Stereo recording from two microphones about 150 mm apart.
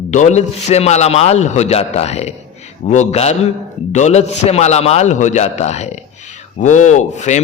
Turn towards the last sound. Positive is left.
turn(degrees=50)  # may be behind; listen again after turning